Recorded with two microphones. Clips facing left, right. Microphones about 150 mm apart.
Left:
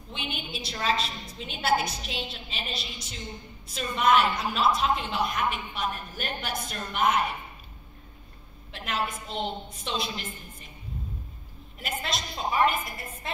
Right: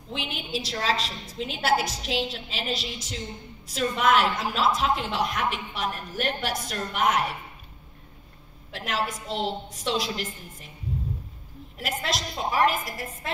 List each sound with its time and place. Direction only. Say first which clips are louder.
0.1 s a woman's voice: right 4 dB; 90° right
8.7 s a woman's voice: right 2 dB; 90° right
11.8 s a woman's voice: right 3 dB; 90° right